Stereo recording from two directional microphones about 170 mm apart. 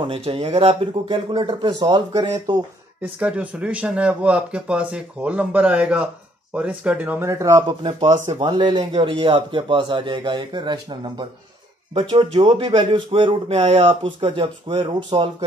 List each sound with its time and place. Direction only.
0.0 s speech: 35° right (ahead or behind)
3.0 s speech: 5° right (ahead or behind); by 8.1 s 25° right (ahead or behind)
8.1 s speech: 40° right (ahead or behind)
8.5 s speech: 25° right (ahead or behind)